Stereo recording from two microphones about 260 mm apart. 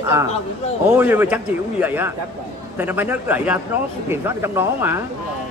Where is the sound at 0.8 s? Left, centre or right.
Centre.